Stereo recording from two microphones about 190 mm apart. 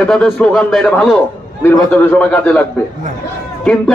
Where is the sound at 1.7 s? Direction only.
10° left (ahead or behind).